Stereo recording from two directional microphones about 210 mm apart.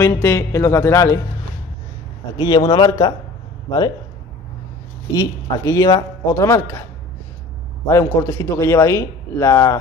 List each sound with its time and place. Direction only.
0.0 s a man's voice: 10° left (ahead or behind)
2.3 s a man's voice: 20° left (ahead or behind)
5.1 s a man's voice: 15° left (ahead or behind)